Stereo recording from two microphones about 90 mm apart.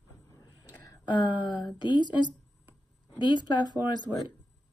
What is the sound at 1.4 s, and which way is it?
Speech, 60° left (ahead or behind).